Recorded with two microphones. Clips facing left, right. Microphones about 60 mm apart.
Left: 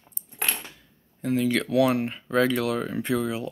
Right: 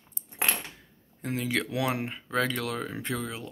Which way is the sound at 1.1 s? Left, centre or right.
Centre.